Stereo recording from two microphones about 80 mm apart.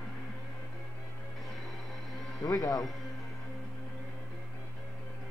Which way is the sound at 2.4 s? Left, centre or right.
Left.